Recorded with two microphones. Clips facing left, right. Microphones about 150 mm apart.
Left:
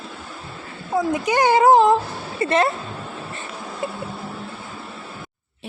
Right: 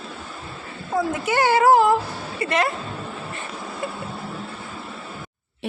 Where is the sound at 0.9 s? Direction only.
15° left (ahead or behind).